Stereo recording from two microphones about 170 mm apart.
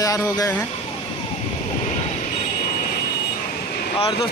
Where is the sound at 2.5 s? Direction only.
50° left (ahead or behind).